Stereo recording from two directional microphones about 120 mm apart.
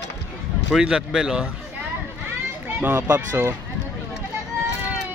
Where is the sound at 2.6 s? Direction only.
15° right (ahead or behind).